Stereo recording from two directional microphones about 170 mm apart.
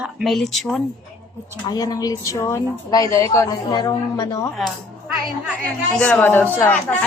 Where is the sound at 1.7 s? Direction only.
20° left (ahead or behind).